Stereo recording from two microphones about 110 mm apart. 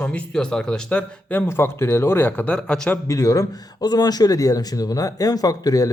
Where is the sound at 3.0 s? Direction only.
30° left (ahead or behind).